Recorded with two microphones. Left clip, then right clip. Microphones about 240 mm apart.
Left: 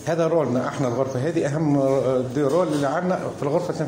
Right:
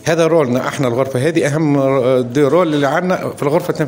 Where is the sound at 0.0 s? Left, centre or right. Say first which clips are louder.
Right 8 dB; right.